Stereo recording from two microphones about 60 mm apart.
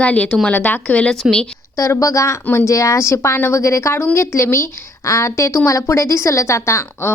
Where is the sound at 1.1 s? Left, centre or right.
Centre.